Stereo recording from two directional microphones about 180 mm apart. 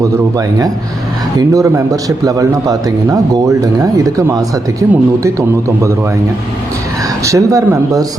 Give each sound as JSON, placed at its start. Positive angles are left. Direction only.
{"t": 0.0, "sound": "speech", "side_deg": -20}
{"t": 7.3, "sound": "speech", "side_deg": -15}